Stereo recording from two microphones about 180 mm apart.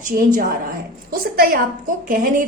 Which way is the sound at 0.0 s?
45° right (ahead or behind).